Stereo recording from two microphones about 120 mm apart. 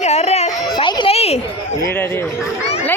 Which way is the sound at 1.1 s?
60° left (ahead or behind).